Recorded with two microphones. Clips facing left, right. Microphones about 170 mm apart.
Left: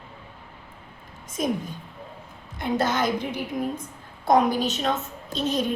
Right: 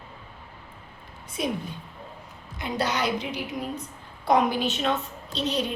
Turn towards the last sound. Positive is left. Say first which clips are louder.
# left 3 dB
turn(degrees=45)  # may be behind; listen again after turning